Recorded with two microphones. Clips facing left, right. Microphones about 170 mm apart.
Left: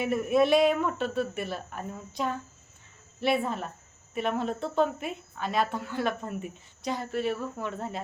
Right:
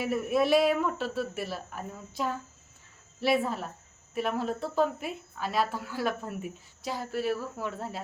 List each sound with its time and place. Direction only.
0.0 s a woman's voice: centre (ahead or behind)